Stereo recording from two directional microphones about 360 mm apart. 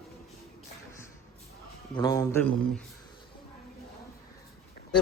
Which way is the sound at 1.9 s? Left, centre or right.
Centre.